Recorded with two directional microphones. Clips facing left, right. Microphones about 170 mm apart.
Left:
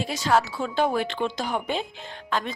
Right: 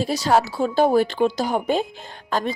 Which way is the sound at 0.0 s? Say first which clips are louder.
Right 4 dB; 35° right (ahead or behind).